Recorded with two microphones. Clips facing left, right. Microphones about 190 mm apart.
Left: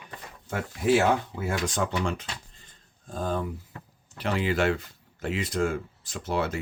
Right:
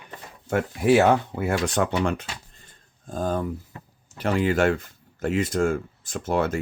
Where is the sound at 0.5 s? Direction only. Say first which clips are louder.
Right 5 dB; 60° right (ahead or behind).